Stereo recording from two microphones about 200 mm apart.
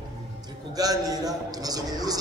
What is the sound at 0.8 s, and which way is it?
A man's voice, 20° right (ahead or behind).